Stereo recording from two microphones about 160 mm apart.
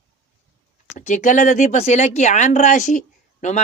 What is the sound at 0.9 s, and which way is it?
Speech, 50° left (ahead or behind).